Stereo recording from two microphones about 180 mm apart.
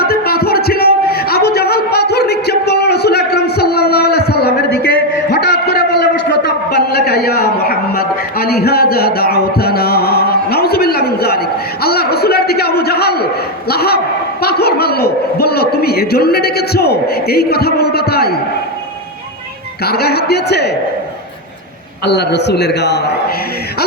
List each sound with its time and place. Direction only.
0.0 s a sound: 60° left (ahead or behind)
19.8 s a man's voice: 60° left (ahead or behind)
22.0 s a man's voice: 70° left (ahead or behind)